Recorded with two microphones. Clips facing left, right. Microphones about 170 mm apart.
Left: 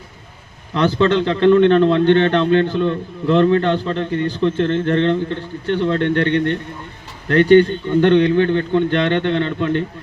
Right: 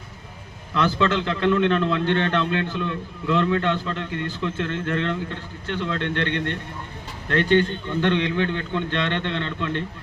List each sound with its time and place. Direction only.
0.7 s a man's voice: 35° left (ahead or behind)
7.3 s a man's voice: 40° left (ahead or behind)